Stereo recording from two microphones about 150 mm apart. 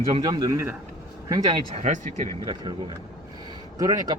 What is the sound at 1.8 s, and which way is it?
Speech, 55° right (ahead or behind).